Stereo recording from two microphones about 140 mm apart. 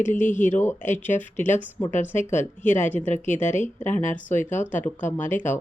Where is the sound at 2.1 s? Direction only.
60° left (ahead or behind).